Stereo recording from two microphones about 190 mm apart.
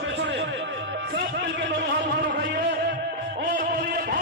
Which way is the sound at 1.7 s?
60° right (ahead or behind).